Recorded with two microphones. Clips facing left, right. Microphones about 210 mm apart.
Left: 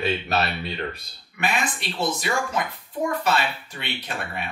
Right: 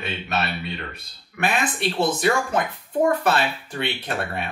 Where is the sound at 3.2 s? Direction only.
55° right (ahead or behind).